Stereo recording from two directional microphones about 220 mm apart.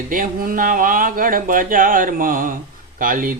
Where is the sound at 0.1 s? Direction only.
40° right (ahead or behind).